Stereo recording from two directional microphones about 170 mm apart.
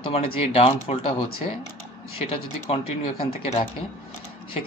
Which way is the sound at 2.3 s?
35° left (ahead or behind).